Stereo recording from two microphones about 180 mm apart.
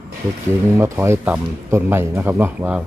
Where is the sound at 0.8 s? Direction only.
15° right (ahead or behind).